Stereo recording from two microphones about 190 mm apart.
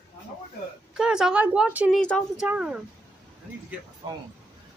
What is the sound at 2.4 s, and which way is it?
Speech, 5° right (ahead or behind).